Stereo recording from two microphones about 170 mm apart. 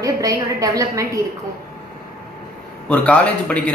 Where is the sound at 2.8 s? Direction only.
5° left (ahead or behind).